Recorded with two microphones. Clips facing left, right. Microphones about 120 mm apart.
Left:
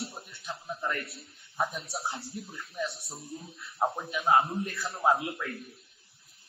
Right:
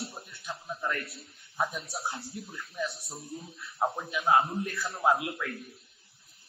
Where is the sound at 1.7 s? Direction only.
25° left (ahead or behind).